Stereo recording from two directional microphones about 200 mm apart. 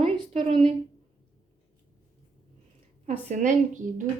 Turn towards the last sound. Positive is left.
turn(degrees=-40)  # may be behind; listen again after turning